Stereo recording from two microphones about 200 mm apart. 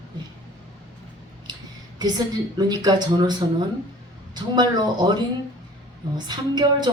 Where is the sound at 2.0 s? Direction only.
20° right (ahead or behind).